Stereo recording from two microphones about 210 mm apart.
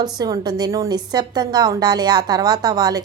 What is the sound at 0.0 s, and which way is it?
A woman's voice, 20° right (ahead or behind).